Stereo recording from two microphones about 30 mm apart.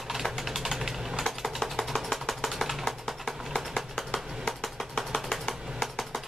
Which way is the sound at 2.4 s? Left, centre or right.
Centre.